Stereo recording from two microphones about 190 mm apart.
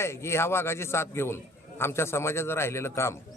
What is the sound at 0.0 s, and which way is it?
Speech, 15° left (ahead or behind).